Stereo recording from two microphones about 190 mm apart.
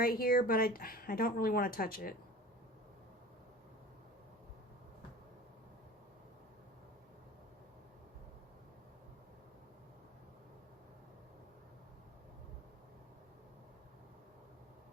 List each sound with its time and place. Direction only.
0.0 s speech: 50° left (ahead or behind)